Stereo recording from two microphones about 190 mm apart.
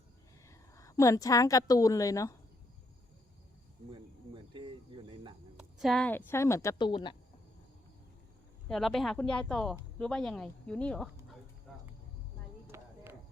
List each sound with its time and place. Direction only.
0.8 s speech: 15° left (ahead or behind)
5.5 s speech: centre (ahead or behind); by 7.2 s 25° left (ahead or behind)
8.7 s speech: centre (ahead or behind)
12.7 s a sound: 15° right (ahead or behind)